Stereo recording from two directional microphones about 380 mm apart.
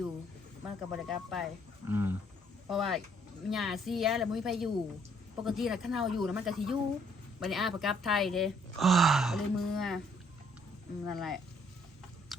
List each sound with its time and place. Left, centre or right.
0.6 s a man's voice: centre
11.0 s a man's voice: centre
12.3 s a sound: centre